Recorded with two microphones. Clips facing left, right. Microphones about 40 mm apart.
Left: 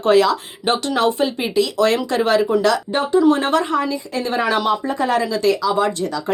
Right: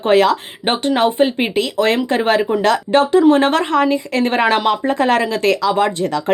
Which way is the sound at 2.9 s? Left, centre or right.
Right.